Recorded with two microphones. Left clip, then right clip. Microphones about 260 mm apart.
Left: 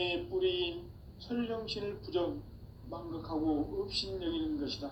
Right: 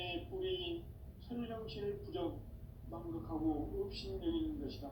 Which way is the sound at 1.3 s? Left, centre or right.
Left.